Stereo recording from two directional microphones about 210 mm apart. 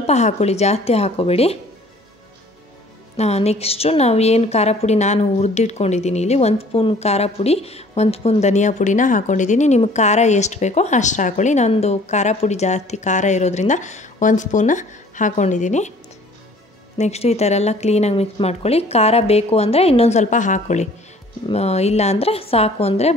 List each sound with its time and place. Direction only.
0.0 s speech: 30° left (ahead or behind)
3.2 s a woman's voice: 30° left (ahead or behind)
17.0 s a woman's voice: 30° left (ahead or behind)